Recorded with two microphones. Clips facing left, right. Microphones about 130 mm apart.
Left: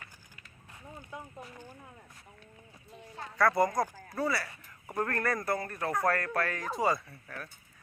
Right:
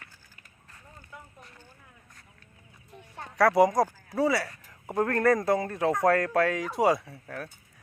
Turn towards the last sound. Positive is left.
turn(degrees=-65)  # may be behind; listen again after turning